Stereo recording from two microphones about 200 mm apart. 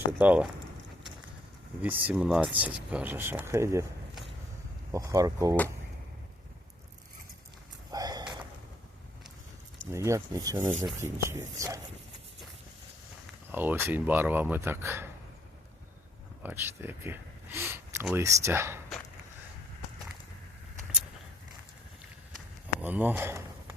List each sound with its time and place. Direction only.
0.2 s speech: 10° right (ahead or behind)
1.8 s speech: 10° right (ahead or behind)
4.9 s speech: 15° right (ahead or behind)
7.9 s a sound: 20° right (ahead or behind)
9.9 s speech: 15° right (ahead or behind)
13.5 s speech: 10° right (ahead or behind)
16.4 s speech: 10° right (ahead or behind)
22.8 s speech: 10° right (ahead or behind)